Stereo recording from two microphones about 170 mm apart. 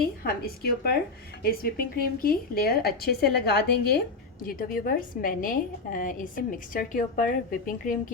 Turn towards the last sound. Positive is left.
turn(degrees=55)  # may be behind; listen again after turning